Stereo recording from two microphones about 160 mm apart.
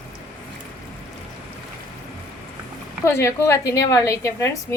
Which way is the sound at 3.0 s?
15° left (ahead or behind).